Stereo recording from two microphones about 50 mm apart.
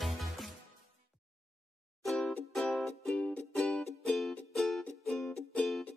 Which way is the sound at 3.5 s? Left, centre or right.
Left.